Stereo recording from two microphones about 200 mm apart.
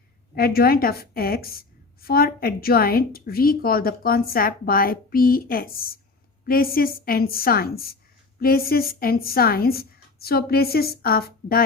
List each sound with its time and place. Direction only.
0.3 s a woman's voice: 50° left (ahead or behind)